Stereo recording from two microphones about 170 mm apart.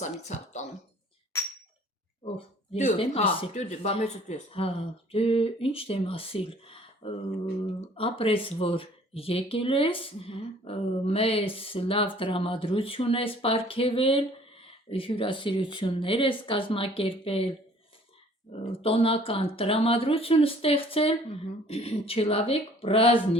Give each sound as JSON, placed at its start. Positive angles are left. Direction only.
{"t": 0.0, "sound": "speech", "side_deg": 40}
{"t": 2.7, "sound": "speech", "side_deg": 40}
{"t": 18.7, "sound": "speech", "side_deg": 35}